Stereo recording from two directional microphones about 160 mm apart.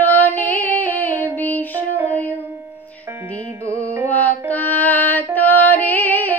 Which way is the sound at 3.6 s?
15° right (ahead or behind).